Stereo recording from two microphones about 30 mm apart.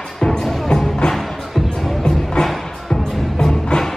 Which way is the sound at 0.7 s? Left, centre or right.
Left.